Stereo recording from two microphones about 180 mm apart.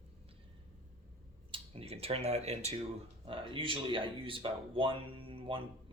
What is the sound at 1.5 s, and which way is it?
Speech, 30° right (ahead or behind).